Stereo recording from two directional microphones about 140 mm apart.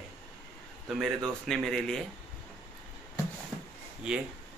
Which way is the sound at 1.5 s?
5° left (ahead or behind).